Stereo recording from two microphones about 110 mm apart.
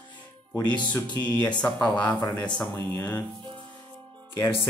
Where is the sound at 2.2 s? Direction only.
40° left (ahead or behind).